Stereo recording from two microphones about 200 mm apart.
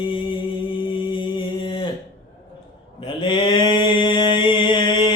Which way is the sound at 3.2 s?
25° left (ahead or behind).